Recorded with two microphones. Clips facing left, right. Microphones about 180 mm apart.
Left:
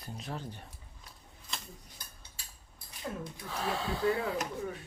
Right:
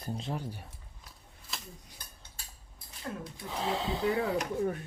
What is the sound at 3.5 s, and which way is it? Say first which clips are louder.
Speech: right 2 dB; 20° right (ahead or behind).